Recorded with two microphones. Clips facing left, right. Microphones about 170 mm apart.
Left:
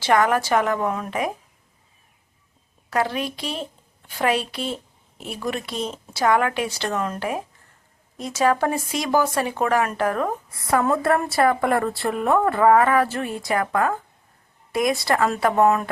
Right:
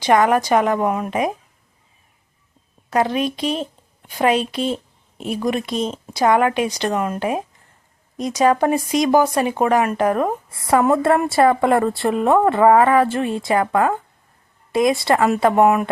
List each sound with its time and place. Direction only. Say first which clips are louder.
0.0 s speech: right 4 dB; 20° right (ahead or behind)
2.9 s speech: right 5 dB; 20° right (ahead or behind)